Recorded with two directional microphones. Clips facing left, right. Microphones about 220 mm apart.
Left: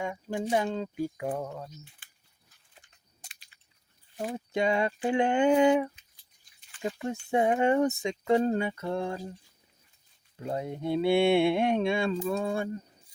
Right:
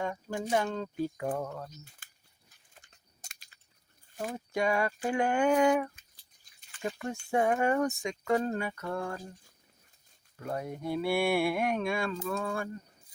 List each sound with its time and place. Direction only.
0.0 s speech: 15° left (ahead or behind)
1.8 s speech: 45° right (ahead or behind)
2.7 s a sound: 45° right (ahead or behind)
4.4 s speech: 25° left (ahead or behind)
10.3 s speech: 25° left (ahead or behind)